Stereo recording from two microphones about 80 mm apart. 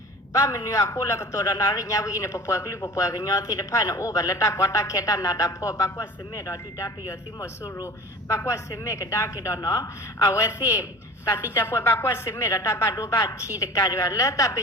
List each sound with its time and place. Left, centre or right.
0.3 s a woman's voice: left
1.5 s a woman's voice: left
13.6 s speech: left